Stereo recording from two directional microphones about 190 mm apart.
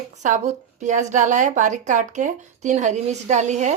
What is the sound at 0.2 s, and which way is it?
A woman's voice, 40° right (ahead or behind).